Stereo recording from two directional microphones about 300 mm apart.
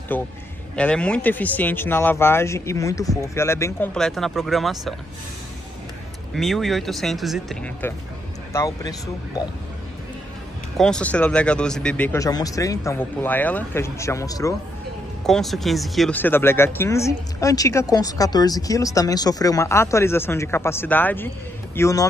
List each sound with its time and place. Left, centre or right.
0.1 s speech: centre
6.3 s speech: centre
10.8 s speech: centre
15.2 s speech: centre